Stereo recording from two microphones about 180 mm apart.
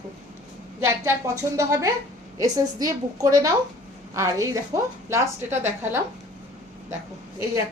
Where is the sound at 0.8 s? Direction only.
15° right (ahead or behind).